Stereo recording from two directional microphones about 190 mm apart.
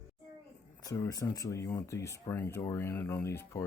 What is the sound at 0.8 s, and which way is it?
Speech, 15° left (ahead or behind).